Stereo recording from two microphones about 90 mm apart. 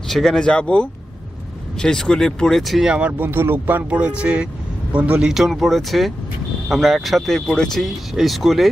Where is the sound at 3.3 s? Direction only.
25° right (ahead or behind).